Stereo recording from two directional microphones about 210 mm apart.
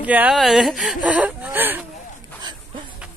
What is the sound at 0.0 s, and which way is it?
Speech, 5° right (ahead or behind).